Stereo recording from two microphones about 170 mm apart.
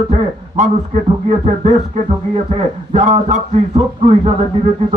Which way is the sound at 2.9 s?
45° right (ahead or behind).